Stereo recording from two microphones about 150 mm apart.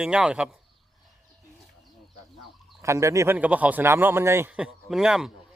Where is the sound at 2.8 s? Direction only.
20° right (ahead or behind).